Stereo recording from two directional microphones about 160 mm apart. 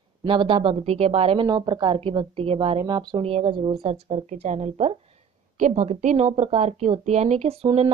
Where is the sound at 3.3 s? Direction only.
40° right (ahead or behind).